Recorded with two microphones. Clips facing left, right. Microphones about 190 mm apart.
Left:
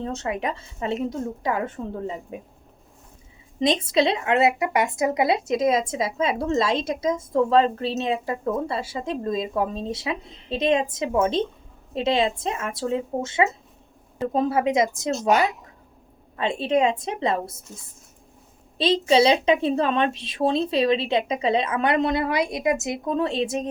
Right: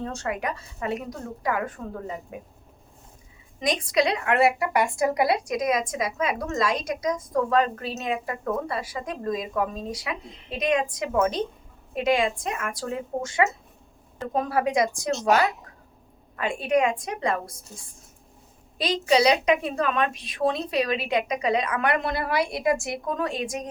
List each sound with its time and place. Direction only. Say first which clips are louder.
0.0 s speech: left 2 dB; 20° left (ahead or behind)
3.6 s speech: left 3 dB; 25° left (ahead or behind)
18.8 s speech: left 3 dB; 25° left (ahead or behind)